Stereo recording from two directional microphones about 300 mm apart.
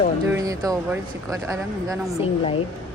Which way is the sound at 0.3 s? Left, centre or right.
Centre.